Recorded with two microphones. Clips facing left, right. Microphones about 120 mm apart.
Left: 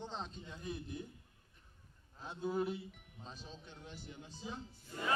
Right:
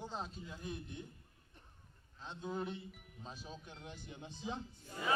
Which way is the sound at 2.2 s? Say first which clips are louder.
Left 4 dB; 5° left (ahead or behind).